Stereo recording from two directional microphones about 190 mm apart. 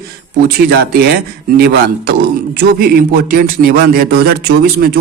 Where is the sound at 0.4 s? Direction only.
55° right (ahead or behind).